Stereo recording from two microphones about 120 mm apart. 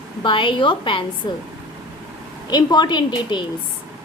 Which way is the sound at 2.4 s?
35° left (ahead or behind).